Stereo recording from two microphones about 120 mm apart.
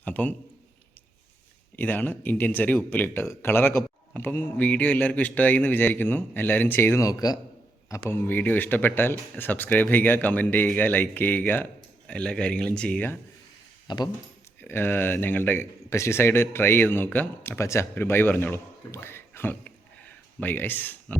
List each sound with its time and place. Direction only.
0.0 s a sound: 15° left (ahead or behind)
1.7 s a man's voice: 15° left (ahead or behind); by 7.3 s 30° left (ahead or behind)
8.1 s a man's voice: 15° left (ahead or behind)
13.8 s speech: 35° left (ahead or behind)
14.6 s speech: 20° left (ahead or behind)